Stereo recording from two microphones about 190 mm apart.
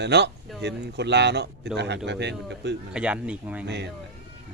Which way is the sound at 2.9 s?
5° right (ahead or behind).